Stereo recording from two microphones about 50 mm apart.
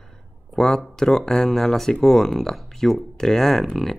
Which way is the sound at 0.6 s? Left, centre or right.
Centre.